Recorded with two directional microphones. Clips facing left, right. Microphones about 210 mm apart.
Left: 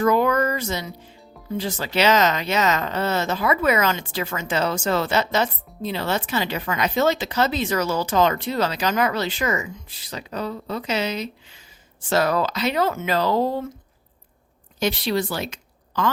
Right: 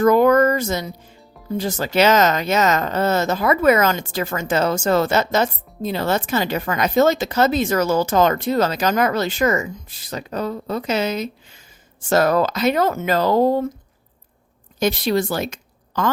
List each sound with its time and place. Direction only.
0.0 s speech: 45° right (ahead or behind)
14.8 s a woman's voice: 45° right (ahead or behind)